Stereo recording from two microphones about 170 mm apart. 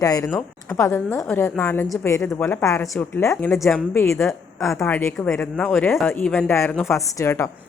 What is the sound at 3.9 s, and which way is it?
A woman's voice, 15° left (ahead or behind).